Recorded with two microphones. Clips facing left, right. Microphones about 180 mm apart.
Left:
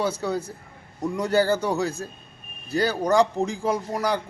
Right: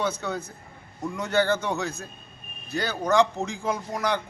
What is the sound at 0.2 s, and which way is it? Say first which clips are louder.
A man's voice: left 4 dB; 30° left (ahead or behind).